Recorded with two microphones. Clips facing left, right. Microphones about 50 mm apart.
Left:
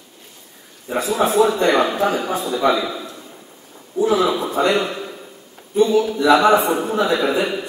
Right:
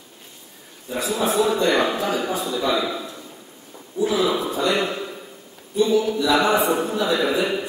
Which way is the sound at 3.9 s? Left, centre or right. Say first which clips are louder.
Left 3 dB; left.